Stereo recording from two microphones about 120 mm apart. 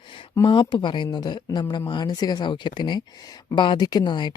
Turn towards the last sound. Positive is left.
turn(degrees=35)  # may be behind; listen again after turning